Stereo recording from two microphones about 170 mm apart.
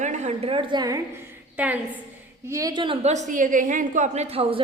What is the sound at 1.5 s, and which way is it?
Speech, 10° right (ahead or behind).